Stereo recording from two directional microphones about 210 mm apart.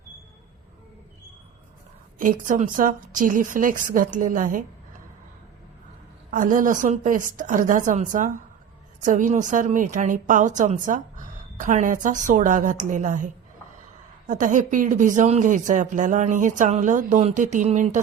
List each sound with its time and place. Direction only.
2.1 s a woman's voice: 40° right (ahead or behind)
6.3 s a woman's voice: 40° right (ahead or behind)